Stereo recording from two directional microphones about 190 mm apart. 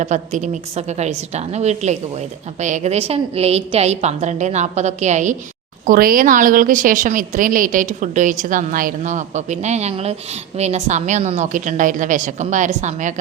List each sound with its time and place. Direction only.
0.0 s a woman's voice: 40° right (ahead or behind)